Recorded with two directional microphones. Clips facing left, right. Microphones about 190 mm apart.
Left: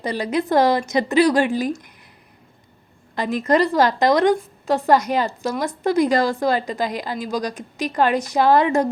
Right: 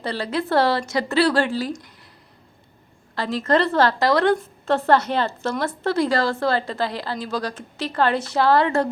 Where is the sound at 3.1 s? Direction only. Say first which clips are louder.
Left 2 dB; 15° left (ahead or behind).